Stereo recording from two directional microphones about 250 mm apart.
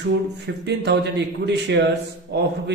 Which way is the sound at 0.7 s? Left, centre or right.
Right.